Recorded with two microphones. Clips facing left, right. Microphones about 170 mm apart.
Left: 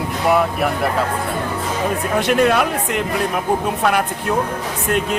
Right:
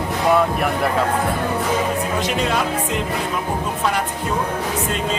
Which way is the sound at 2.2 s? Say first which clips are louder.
Left 9 dB; 60° left (ahead or behind).